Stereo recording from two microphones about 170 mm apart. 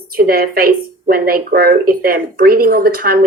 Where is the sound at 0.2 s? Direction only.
60° right (ahead or behind).